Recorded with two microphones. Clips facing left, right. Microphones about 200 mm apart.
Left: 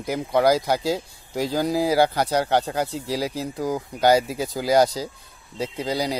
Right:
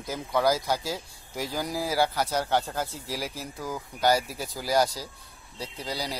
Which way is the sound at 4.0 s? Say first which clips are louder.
Left 6 dB; 20° left (ahead or behind).